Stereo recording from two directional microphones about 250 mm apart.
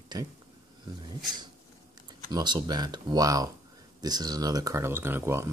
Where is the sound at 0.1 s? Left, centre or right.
Centre.